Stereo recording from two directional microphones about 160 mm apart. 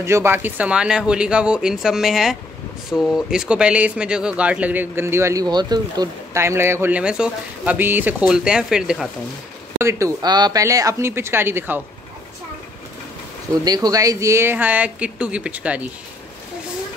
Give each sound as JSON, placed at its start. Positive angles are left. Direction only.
{"t": 0.0, "sound": "speech", "side_deg": -15}
{"t": 9.8, "sound": "speech", "side_deg": -20}
{"t": 13.7, "sound": "speech", "side_deg": -25}